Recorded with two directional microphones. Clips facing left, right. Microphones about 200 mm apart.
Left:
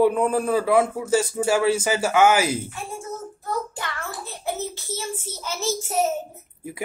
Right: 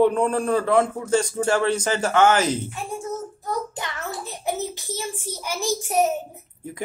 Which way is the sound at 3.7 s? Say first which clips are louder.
Right 1 dB; 20° right (ahead or behind).